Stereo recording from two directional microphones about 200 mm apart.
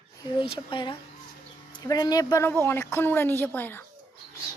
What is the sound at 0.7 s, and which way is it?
A woman's voice, 25° left (ahead or behind).